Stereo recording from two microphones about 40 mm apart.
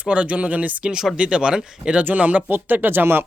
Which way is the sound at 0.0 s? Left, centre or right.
Right.